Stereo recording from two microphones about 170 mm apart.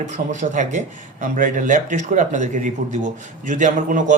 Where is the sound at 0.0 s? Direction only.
45° right (ahead or behind).